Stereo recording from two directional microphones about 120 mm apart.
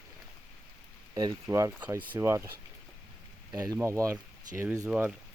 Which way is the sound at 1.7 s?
15° right (ahead or behind).